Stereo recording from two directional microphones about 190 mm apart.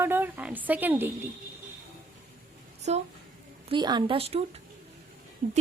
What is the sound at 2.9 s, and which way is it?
Female singing, 35° right (ahead or behind).